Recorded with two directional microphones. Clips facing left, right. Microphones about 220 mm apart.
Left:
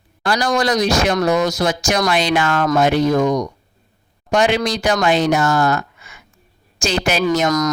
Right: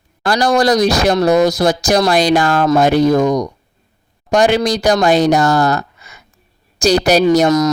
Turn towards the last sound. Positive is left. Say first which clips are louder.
# right 6 dB
turn(degrees=-30)  # may be behind; listen again after turning